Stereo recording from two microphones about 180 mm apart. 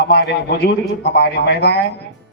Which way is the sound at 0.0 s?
60° left (ahead or behind).